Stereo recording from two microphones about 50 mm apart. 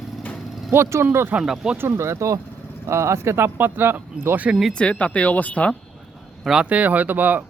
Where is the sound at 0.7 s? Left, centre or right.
Right.